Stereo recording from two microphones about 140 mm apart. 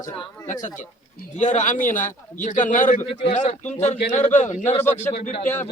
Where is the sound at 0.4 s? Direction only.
65° left (ahead or behind).